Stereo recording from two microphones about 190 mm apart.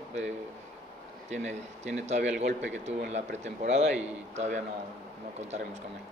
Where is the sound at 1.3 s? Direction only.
35° right (ahead or behind).